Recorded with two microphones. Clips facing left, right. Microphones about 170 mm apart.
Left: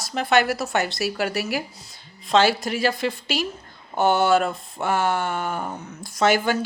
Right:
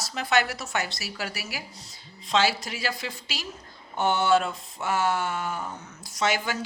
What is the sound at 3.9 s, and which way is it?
Speech, 35° left (ahead or behind).